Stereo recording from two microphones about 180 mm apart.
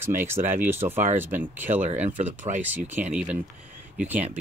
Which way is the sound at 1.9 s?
40° right (ahead or behind).